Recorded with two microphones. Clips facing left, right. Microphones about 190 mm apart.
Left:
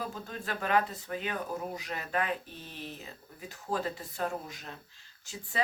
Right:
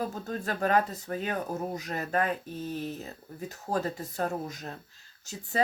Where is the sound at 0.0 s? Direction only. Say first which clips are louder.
Right 6 dB; 40° right (ahead or behind).